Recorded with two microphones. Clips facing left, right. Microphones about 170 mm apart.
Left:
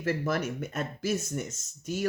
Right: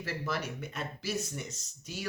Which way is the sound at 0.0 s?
50° left (ahead or behind).